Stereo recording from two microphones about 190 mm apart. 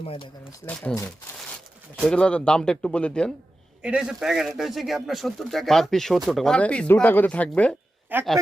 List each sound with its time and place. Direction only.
0.0 s speech: 30° left (ahead or behind)
0.6 s speech: 5° left (ahead or behind)
2.0 s speech: 5° left (ahead or behind)
8.1 s a man's voice: 10° right (ahead or behind)